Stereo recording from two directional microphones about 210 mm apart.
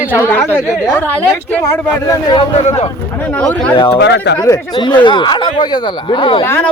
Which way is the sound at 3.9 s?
55° left (ahead or behind).